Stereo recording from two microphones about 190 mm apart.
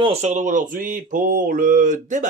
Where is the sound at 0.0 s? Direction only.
35° right (ahead or behind).